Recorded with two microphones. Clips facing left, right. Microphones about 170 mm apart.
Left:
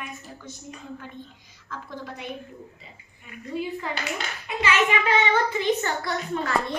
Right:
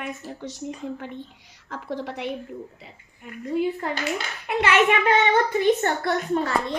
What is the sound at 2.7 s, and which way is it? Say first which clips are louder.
A child's voice: right 3 dB; 55° right (ahead or behind).